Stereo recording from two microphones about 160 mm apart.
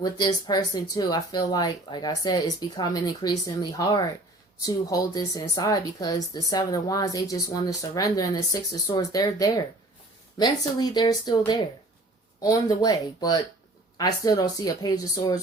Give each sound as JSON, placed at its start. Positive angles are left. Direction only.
{"t": 0.0, "sound": "speech", "side_deg": 25}